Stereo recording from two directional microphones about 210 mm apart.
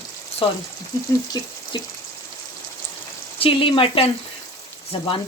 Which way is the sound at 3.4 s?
25° left (ahead or behind).